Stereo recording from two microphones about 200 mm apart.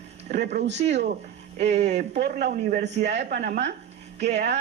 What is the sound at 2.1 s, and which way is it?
Speech, 55° right (ahead or behind).